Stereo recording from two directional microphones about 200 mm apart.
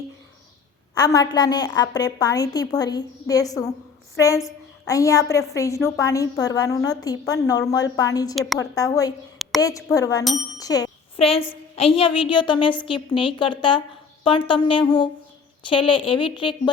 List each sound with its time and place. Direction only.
0.9 s a woman's voice: 20° left (ahead or behind)
11.2 s a woman's voice: 30° left (ahead or behind)